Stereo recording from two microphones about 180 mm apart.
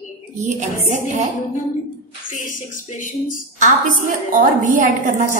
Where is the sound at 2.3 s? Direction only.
50° left (ahead or behind).